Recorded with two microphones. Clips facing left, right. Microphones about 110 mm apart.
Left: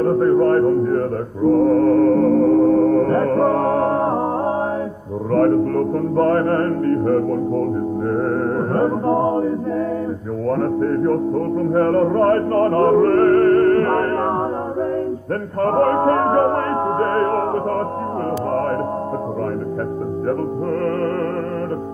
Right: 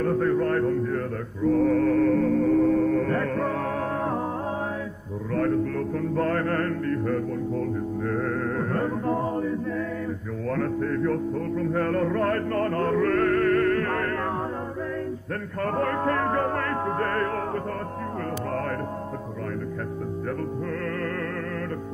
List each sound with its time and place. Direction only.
0.0 s a sound: 35° left (ahead or behind)
0.8 s music: 40° left (ahead or behind)
10.5 s music: 35° left (ahead or behind)
15.6 s music: 40° left (ahead or behind)